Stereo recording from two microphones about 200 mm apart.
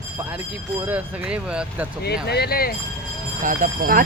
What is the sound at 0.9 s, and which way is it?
Speech, 5° right (ahead or behind).